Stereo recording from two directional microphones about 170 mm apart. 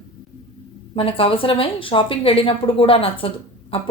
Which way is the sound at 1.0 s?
30° left (ahead or behind).